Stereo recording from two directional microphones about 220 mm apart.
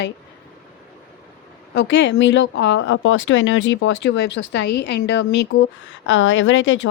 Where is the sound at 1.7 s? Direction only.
55° left (ahead or behind).